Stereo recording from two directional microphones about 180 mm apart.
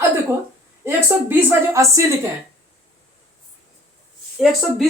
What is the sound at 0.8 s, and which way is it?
Speech, 15° right (ahead or behind).